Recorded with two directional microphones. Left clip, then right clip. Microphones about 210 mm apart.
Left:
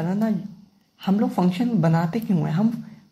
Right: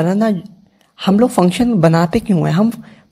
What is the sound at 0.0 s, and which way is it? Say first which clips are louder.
A woman's voice: right 10 dB; 45° right (ahead or behind).